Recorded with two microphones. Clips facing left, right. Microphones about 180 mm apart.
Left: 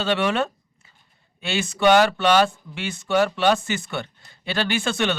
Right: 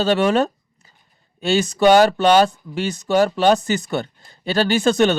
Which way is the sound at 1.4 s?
40° right (ahead or behind).